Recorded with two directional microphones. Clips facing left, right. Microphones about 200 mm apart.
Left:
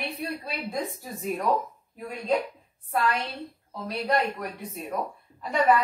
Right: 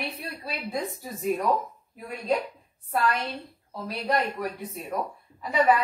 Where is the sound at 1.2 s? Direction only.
Centre (ahead or behind).